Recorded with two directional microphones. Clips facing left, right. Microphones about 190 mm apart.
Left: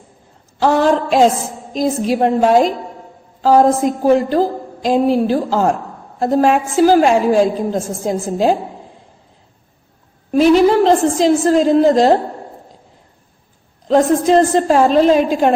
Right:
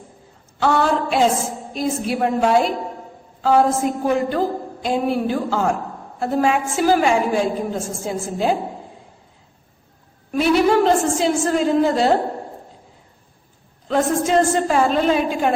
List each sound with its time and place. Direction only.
0.6 s a woman's voice: 40° left (ahead or behind)
10.3 s a woman's voice: 35° left (ahead or behind)
13.8 s a woman's voice: 35° left (ahead or behind)